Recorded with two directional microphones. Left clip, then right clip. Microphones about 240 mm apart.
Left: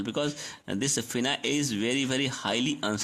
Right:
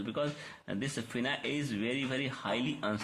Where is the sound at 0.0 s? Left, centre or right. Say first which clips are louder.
Left 5 dB; left.